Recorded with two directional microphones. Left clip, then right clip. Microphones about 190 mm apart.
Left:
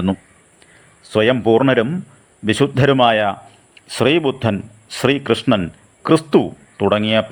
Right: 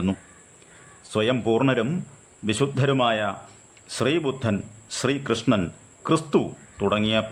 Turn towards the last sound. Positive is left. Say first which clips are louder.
# left 7 dB
turn(degrees=20)  # may be behind; listen again after turning